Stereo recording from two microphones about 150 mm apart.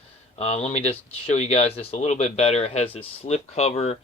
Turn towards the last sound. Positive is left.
turn(degrees=45)  # may be behind; listen again after turning